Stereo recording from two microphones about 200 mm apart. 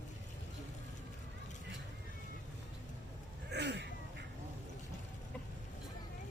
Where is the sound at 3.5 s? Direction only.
60° right (ahead or behind).